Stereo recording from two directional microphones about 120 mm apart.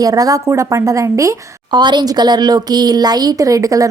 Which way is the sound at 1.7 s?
40° right (ahead or behind).